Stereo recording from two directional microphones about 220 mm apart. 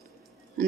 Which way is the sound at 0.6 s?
40° right (ahead or behind).